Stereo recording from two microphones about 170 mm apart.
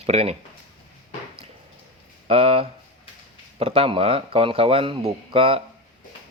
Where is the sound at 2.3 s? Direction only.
35° right (ahead or behind).